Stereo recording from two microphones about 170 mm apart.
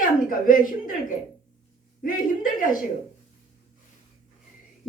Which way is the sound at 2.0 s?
55° left (ahead or behind).